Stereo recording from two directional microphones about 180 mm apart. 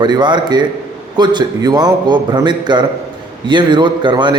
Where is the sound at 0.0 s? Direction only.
25° right (ahead or behind).